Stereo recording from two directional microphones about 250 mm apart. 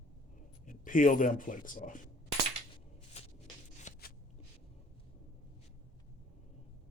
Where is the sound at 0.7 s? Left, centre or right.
Left.